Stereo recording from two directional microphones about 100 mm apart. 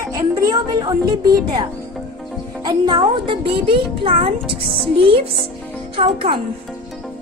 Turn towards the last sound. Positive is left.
turn(degrees=-70)  # may be behind; listen again after turning